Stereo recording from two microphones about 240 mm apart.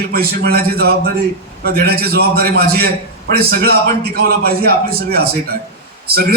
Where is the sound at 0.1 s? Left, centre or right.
Right.